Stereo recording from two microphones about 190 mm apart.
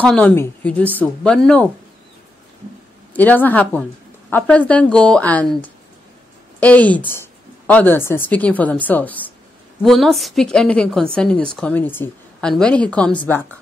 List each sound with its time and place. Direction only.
0.0 s a woman's voice: 5° left (ahead or behind)
3.1 s a woman's voice: 10° left (ahead or behind)